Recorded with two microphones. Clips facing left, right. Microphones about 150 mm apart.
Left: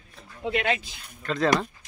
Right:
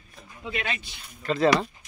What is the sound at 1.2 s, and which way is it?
Speech, 5° right (ahead or behind).